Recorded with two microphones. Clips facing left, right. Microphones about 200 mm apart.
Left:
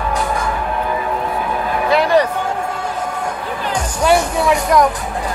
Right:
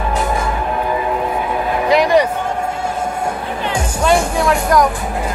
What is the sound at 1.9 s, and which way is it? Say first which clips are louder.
Music: right 1 dB; 15° right (ahead or behind).